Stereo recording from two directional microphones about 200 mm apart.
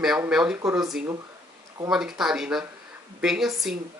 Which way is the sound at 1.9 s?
Centre (ahead or behind).